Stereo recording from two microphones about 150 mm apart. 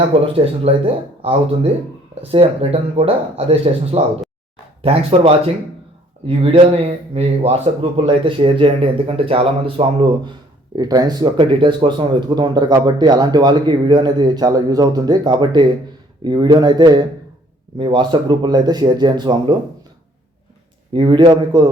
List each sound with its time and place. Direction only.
0.4 s speech: 40° right (ahead or behind)
10.8 s speech: 25° right (ahead or behind)
20.9 s speech: 30° right (ahead or behind)